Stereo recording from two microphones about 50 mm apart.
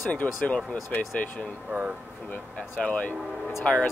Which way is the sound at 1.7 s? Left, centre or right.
Right.